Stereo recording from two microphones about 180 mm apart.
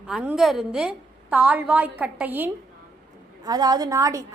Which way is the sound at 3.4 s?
20° right (ahead or behind).